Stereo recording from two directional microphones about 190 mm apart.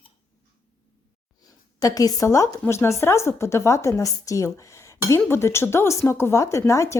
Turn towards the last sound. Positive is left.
turn(degrees=15)  # may be behind; listen again after turning